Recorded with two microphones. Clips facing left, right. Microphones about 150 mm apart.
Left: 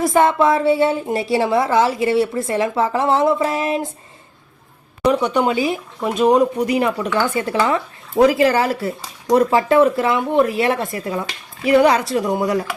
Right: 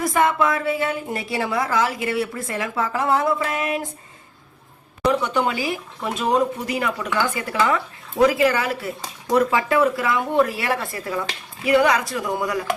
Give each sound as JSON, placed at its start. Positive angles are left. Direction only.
{"t": 0.0, "sound": "a woman's voice", "side_deg": 30}
{"t": 5.2, "sound": "a woman's voice", "side_deg": 20}